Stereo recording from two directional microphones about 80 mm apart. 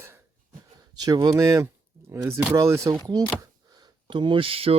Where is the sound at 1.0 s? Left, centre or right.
Right.